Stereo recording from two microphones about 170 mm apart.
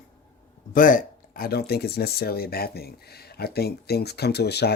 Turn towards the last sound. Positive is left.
turn(degrees=75)  # may be behind; listen again after turning